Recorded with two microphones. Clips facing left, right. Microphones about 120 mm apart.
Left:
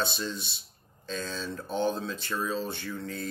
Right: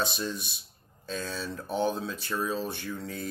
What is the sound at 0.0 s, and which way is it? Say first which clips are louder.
Speech: right 1 dB; 10° right (ahead or behind).